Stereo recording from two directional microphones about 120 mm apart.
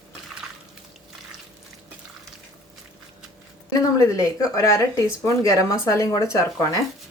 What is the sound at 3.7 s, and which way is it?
Speech, 30° left (ahead or behind).